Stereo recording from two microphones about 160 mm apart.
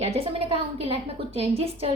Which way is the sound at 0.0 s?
40° right (ahead or behind).